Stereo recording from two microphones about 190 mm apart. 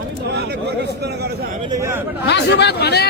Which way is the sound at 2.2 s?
60° left (ahead or behind).